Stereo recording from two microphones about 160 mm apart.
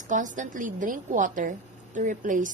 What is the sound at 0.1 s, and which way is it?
A woman's voice, 55° right (ahead or behind).